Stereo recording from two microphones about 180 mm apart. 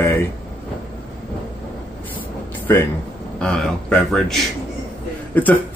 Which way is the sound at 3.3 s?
5° left (ahead or behind).